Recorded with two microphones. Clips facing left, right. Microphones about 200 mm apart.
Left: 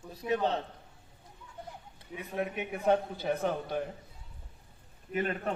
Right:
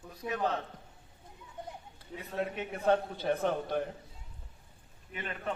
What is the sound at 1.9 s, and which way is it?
A man's voice, 15° left (ahead or behind).